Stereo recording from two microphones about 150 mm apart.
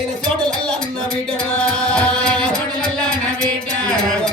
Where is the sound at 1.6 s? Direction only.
5° left (ahead or behind).